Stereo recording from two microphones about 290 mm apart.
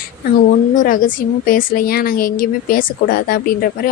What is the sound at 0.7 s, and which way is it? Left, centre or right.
A woman's voice, left.